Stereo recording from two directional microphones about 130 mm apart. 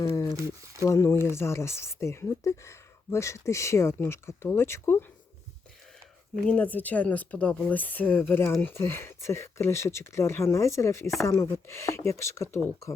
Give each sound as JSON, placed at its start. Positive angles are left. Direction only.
{"t": 0.3, "sound": "speech", "side_deg": -25}
{"t": 0.9, "sound": "speech", "side_deg": 20}
{"t": 6.4, "sound": "speech", "side_deg": 10}